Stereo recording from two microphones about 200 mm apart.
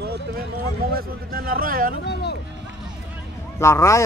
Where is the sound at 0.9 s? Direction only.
50° right (ahead or behind).